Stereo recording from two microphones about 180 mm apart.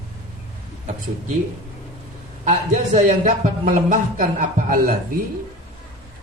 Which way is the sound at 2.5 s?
45° right (ahead or behind).